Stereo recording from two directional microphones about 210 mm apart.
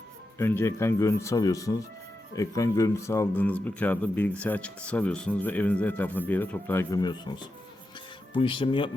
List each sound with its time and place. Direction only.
0.3 s speech: 10° left (ahead or behind)